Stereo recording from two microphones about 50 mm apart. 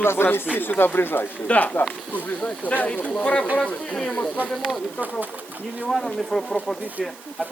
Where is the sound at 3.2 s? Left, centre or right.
Left.